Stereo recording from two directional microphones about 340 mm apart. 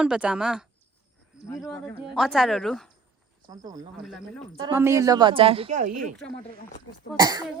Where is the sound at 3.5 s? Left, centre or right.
Centre.